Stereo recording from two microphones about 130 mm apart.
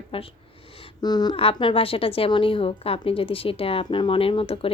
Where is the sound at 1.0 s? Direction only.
30° left (ahead or behind).